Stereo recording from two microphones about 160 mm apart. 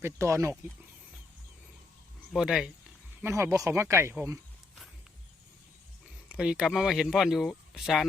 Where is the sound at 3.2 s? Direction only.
15° right (ahead or behind).